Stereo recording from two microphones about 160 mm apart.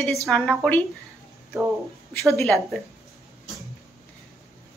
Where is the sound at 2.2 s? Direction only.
Centre (ahead or behind).